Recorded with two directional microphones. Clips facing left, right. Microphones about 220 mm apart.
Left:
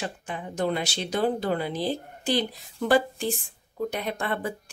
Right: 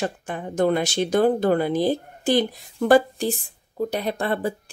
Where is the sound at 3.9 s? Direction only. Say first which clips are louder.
Right 5 dB; 35° right (ahead or behind).